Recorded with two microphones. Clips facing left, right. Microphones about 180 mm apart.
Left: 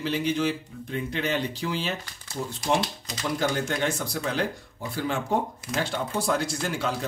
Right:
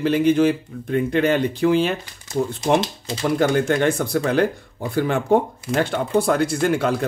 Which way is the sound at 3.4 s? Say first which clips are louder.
Right 8 dB; 55° right (ahead or behind).